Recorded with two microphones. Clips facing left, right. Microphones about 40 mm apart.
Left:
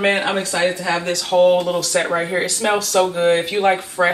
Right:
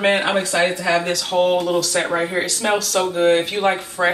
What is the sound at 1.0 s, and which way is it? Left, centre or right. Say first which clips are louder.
Speech: left 4 dB; centre.